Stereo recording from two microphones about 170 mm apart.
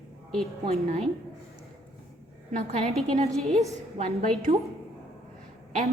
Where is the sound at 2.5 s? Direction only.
40° right (ahead or behind).